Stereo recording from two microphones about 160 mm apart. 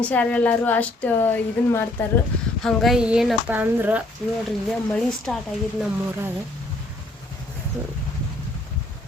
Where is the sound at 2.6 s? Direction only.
Centre (ahead or behind).